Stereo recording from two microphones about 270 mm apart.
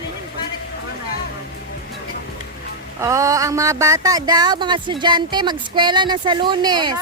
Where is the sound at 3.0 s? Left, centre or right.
Centre.